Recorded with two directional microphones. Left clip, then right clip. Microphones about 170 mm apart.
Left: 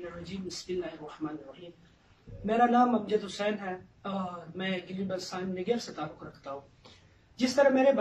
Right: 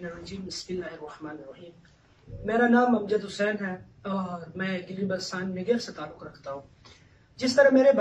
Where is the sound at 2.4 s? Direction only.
10° left (ahead or behind).